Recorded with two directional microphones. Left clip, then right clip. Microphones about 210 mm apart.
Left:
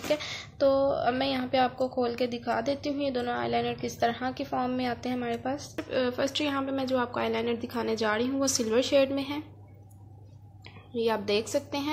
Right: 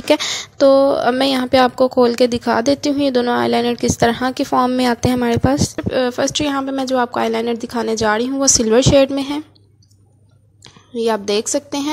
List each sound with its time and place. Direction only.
0.1 s a woman's voice: 50° right (ahead or behind)
10.6 s a woman's voice: 45° right (ahead or behind)